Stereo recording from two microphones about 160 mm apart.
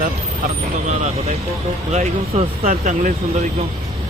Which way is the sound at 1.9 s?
45° right (ahead or behind).